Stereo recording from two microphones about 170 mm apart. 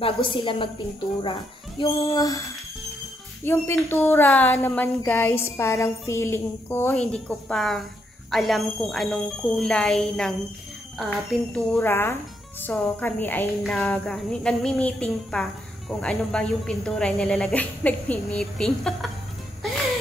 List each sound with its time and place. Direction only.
0.0 s a woman's voice: 30° left (ahead or behind)
1.8 s child singing: 20° left (ahead or behind)
3.4 s speech: 15° left (ahead or behind)
11.5 s speech: 10° left (ahead or behind)